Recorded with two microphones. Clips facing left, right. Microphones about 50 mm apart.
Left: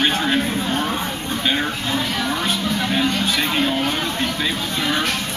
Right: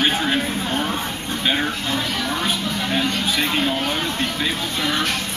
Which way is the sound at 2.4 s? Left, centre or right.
Centre.